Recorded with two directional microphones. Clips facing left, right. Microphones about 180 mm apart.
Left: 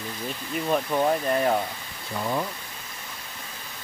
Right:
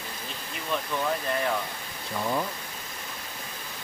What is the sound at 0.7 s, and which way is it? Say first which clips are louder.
Speech: left 6 dB; 40° left (ahead or behind).